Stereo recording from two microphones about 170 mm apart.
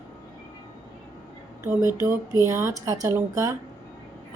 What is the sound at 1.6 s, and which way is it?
A woman's voice, 15° right (ahead or behind).